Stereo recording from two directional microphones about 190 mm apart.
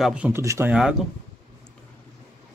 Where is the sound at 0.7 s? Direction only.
5° right (ahead or behind).